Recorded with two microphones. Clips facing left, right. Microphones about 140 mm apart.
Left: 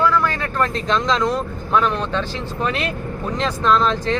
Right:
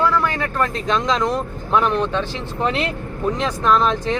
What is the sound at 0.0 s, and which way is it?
Speech, 15° right (ahead or behind).